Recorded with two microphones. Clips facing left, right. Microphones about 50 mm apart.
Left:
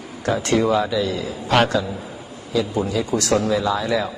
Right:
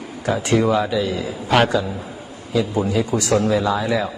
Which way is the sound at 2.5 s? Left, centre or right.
Centre.